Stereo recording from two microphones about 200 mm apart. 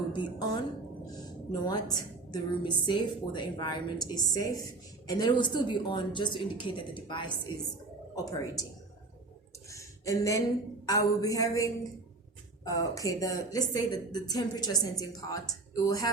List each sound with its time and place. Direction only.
0.1 s a woman's voice: 25° left (ahead or behind)
1.6 s a woman's voice: 20° left (ahead or behind)
9.6 s a sound: 15° left (ahead or behind)
10.8 s a woman's voice: 15° left (ahead or behind)